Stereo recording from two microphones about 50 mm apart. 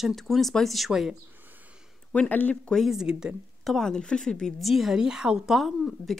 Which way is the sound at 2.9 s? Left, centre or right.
Centre.